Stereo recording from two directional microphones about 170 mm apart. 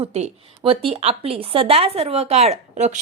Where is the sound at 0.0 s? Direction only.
35° right (ahead or behind).